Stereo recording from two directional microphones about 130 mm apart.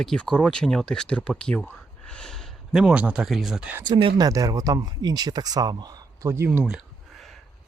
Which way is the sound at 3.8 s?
40° right (ahead or behind).